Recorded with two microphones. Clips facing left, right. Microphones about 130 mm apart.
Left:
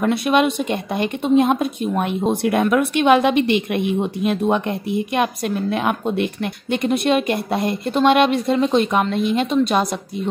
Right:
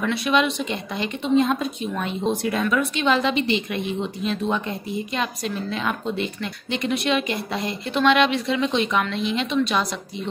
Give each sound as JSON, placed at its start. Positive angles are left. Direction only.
{"t": 0.0, "sound": "a woman's voice", "side_deg": 50}